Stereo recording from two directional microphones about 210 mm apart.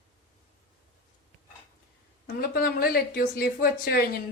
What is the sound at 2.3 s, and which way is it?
Speech, 45° left (ahead or behind).